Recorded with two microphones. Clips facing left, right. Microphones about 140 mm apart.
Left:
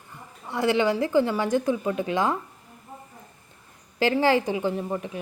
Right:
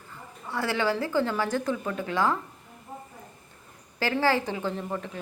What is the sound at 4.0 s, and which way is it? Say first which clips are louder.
A woman's voice: left 4 dB; 20° left (ahead or behind).